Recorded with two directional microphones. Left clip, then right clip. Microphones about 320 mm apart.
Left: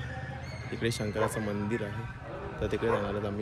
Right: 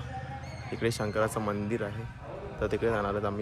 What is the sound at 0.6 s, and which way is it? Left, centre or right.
Speech, centre.